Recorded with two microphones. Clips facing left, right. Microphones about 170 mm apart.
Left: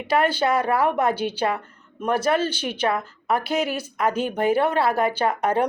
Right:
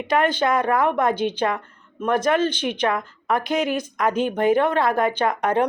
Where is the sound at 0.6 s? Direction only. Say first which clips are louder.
Right 1 dB; 10° left (ahead or behind).